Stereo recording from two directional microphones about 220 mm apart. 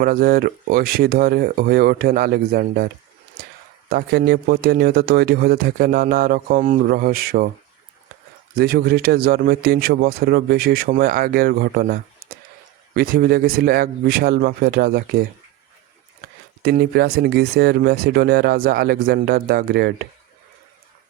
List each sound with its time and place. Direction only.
0.0 s a man's voice: 40° right (ahead or behind)
8.5 s a man's voice: 45° right (ahead or behind)
16.6 s a man's voice: 45° right (ahead or behind)